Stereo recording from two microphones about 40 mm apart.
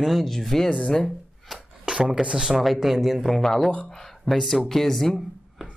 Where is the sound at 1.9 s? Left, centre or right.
Centre.